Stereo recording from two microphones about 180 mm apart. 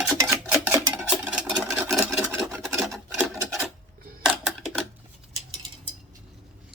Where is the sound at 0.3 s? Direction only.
5° right (ahead or behind).